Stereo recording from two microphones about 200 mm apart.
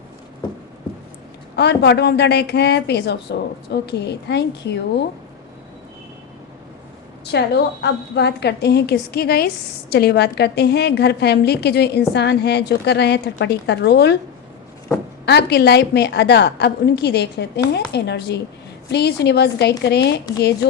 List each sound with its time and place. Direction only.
1.5 s a woman's voice: 55° left (ahead or behind)
7.3 s a woman's voice: 55° left (ahead or behind)
15.3 s a woman's voice: 55° left (ahead or behind)